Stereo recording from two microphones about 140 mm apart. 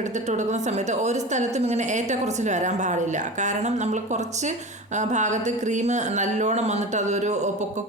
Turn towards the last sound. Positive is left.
turn(degrees=-55)  # may be behind; listen again after turning